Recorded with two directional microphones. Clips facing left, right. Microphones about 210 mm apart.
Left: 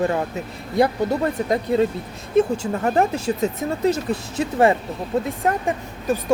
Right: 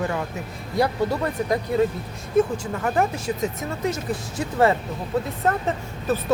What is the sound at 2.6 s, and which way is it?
Speech, 35° left (ahead or behind).